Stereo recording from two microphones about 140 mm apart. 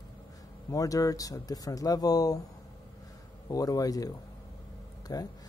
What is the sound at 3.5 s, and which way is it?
Speech, 25° left (ahead or behind).